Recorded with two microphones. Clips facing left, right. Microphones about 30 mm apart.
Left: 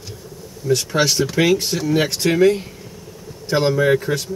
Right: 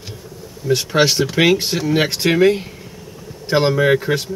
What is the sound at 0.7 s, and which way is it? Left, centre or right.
Speech, right.